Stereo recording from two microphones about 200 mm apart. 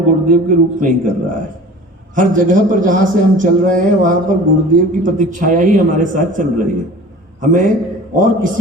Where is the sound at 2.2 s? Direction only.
40° right (ahead or behind).